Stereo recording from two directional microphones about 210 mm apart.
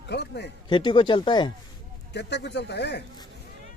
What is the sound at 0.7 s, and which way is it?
Speech, 25° left (ahead or behind).